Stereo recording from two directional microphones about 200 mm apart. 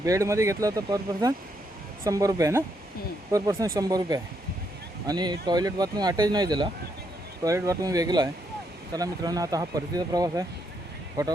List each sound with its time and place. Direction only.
0.0 s speech: 15° right (ahead or behind)